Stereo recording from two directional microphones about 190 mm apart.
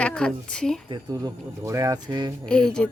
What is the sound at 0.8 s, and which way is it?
Speech, 20° right (ahead or behind).